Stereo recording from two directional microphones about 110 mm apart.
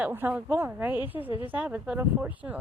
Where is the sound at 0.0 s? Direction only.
15° right (ahead or behind).